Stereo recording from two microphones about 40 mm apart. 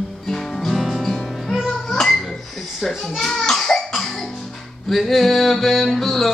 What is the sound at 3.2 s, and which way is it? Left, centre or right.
Cough, centre.